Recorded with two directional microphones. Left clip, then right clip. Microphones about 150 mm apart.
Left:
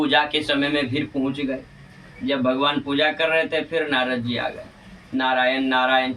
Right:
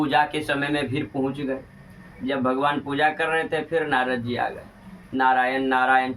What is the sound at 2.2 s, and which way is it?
A man's voice, 15° left (ahead or behind).